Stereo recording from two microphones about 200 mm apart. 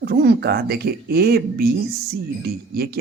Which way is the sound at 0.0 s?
50° right (ahead or behind).